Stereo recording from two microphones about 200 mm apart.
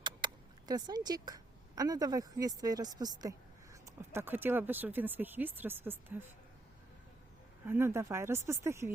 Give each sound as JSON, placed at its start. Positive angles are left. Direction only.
{"t": 0.2, "sound": "a sound", "side_deg": -25}
{"t": 0.7, "sound": "speech", "side_deg": -20}
{"t": 7.7, "sound": "speech", "side_deg": -10}